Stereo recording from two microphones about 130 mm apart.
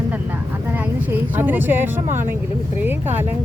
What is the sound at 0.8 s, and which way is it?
Speech, 15° right (ahead or behind).